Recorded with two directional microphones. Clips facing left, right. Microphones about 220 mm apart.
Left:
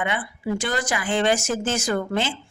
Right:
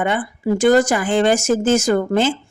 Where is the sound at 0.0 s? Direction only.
45° right (ahead or behind).